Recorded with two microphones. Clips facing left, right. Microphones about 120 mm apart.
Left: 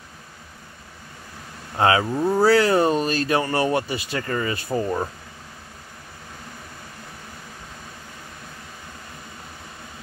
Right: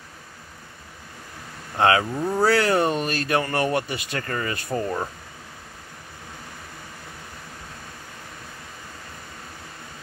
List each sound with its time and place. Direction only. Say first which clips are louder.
1.8 s speech: even; 25° left (ahead or behind)
2.1 s speech: left 3 dB; 10° left (ahead or behind)
2.5 s speech: left 3 dB; 25° left (ahead or behind)